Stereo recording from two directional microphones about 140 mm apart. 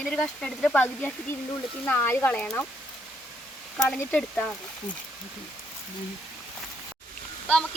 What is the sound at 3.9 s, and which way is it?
Speech, 10° left (ahead or behind).